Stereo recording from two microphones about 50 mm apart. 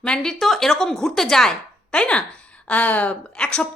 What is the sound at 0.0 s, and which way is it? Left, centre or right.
Speech, centre.